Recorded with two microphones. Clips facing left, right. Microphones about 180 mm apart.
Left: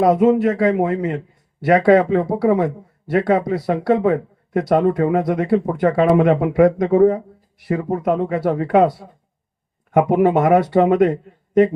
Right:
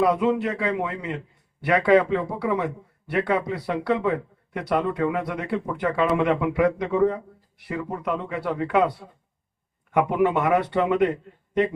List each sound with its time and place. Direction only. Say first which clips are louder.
0.0 s speech: left 7 dB; 45° left (ahead or behind)
9.9 s speech: left 6 dB; 45° left (ahead or behind)